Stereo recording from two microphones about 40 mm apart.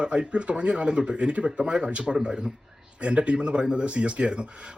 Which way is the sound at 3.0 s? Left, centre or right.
Right.